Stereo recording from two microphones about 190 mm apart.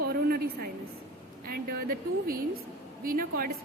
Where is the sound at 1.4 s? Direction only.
50° right (ahead or behind).